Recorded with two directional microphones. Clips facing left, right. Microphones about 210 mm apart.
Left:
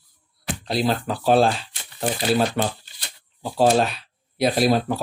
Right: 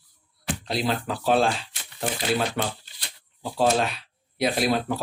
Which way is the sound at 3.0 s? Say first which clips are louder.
Left 3 dB; 40° left (ahead or behind).